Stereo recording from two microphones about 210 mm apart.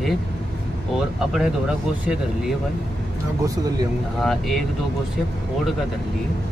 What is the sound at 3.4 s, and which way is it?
Speech, 15° right (ahead or behind).